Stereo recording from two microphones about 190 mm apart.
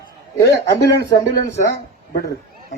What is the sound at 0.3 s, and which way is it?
Speech, 60° left (ahead or behind).